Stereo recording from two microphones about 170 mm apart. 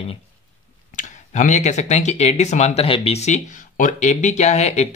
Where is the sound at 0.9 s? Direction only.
45° left (ahead or behind).